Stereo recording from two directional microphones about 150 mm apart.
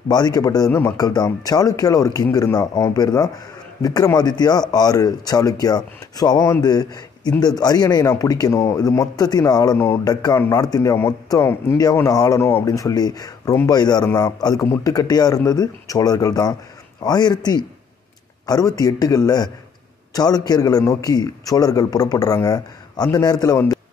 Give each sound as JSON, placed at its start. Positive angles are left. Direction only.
{"t": 0.1, "sound": "a man's voice", "side_deg": 25}